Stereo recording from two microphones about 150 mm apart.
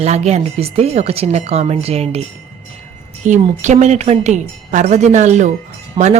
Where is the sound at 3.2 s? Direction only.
55° right (ahead or behind).